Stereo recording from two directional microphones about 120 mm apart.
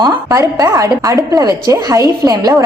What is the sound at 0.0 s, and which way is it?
A woman's voice, 30° right (ahead or behind).